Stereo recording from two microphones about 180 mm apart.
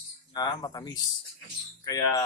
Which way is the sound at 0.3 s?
20° left (ahead or behind).